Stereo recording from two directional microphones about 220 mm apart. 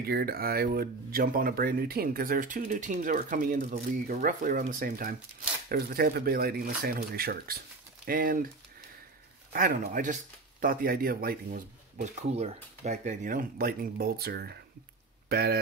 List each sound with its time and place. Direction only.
0.0 s speech: 45° right (ahead or behind)
9.5 s speech: 40° right (ahead or behind)